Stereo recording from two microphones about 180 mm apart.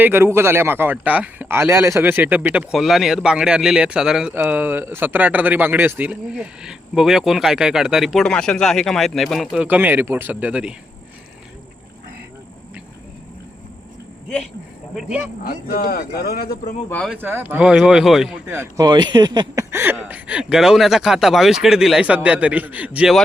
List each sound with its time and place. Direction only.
0.0 s a man's voice: 10° right (ahead or behind)
15.4 s speech: 55° left (ahead or behind)
17.1 s speech: 10° right (ahead or behind)
18.4 s a man's voice: 15° right (ahead or behind)